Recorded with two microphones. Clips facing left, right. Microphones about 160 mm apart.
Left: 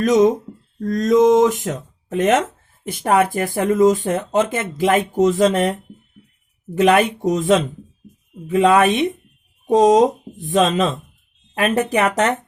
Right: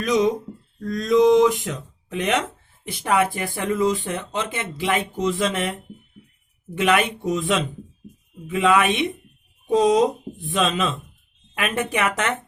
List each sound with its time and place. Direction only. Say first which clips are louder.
0.0 s a woman's voice: left 6 dB; 45° left (ahead or behind)